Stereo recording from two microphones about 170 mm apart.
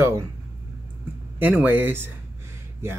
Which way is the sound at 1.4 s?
10° right (ahead or behind).